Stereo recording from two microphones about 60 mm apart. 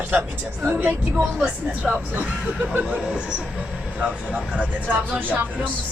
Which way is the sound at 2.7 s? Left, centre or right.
Centre.